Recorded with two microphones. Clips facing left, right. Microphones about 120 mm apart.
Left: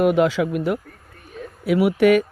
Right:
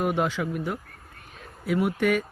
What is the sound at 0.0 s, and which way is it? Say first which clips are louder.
Speech: left 8 dB; 90° left.